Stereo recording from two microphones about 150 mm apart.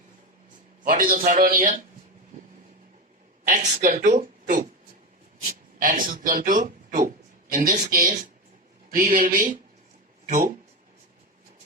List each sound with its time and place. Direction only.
0.9 s a man's voice: 70° right (ahead or behind)
3.4 s speech: 60° right (ahead or behind)
7.5 s a man's voice: 70° right (ahead or behind)